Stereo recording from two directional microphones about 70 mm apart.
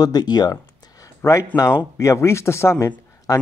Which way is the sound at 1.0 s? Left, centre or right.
Left.